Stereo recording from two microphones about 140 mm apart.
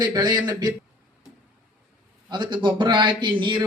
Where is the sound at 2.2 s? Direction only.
30° right (ahead or behind).